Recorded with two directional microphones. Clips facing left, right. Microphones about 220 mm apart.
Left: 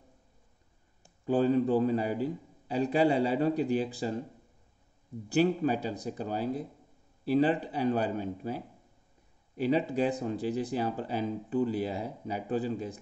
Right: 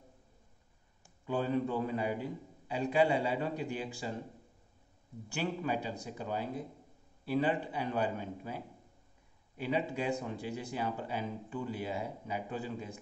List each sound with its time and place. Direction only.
1.2 s speech: 35° left (ahead or behind)
5.3 s speech: 35° left (ahead or behind)